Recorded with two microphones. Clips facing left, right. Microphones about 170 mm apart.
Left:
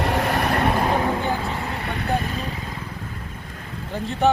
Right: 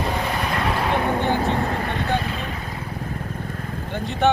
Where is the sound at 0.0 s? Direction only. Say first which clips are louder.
Left 3 dB; 70° left (ahead or behind).